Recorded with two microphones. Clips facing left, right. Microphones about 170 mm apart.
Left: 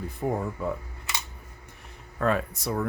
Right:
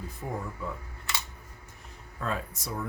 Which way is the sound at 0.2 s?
60° left (ahead or behind).